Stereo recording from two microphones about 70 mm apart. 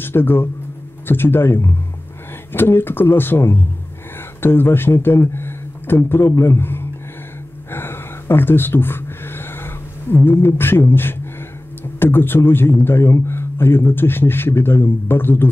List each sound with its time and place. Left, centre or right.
0.0 s a man's voice: left
7.7 s a sound: left
10.4 s speech: left